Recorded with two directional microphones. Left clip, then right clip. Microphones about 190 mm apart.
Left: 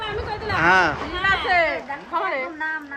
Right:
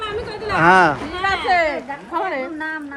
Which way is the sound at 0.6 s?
5° right (ahead or behind).